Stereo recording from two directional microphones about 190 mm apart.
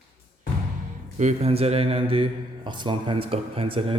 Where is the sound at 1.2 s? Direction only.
35° right (ahead or behind).